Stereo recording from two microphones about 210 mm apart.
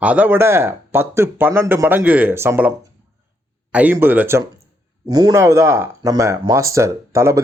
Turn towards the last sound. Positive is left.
turn(degrees=-15)  # may be behind; listen again after turning